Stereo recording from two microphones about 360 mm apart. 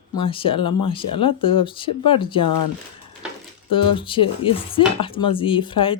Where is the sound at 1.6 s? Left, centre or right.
Centre.